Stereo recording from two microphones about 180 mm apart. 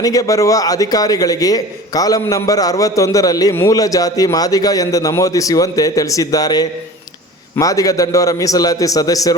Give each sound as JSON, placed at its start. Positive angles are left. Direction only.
{"t": 0.0, "sound": "a man's voice", "side_deg": 20}